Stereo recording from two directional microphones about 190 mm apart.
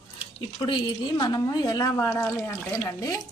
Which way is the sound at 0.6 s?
25° left (ahead or behind).